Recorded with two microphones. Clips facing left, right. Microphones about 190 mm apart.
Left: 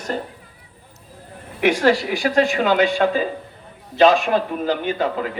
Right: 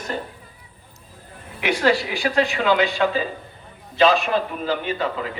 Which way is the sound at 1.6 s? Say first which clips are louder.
Left 3 dB; 50° left (ahead or behind).